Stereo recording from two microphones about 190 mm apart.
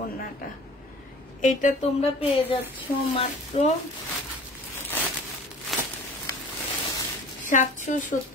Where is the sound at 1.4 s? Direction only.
40° left (ahead or behind).